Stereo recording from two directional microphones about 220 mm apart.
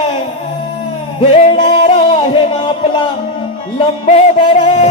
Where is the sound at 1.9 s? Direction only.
25° left (ahead or behind).